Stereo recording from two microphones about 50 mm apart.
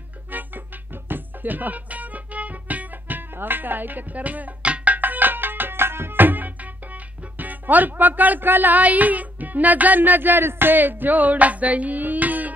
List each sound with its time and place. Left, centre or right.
1.0 s music: right
7.3 s speech: right